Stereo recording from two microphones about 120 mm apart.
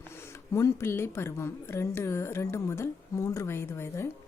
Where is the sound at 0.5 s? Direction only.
25° left (ahead or behind).